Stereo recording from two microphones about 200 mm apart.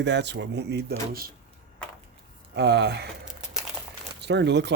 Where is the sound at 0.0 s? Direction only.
60° right (ahead or behind).